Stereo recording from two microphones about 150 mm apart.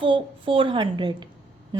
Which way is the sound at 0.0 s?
35° right (ahead or behind).